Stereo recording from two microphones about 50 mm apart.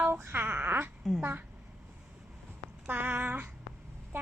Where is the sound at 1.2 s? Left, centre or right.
Right.